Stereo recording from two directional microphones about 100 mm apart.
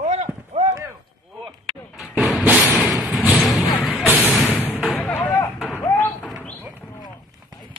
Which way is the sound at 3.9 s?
20° left (ahead or behind).